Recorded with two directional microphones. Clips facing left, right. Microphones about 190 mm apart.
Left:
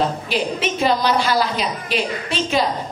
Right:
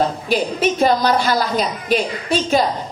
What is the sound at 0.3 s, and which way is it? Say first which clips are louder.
A woman's voice: right 4 dB; 45° right (ahead or behind).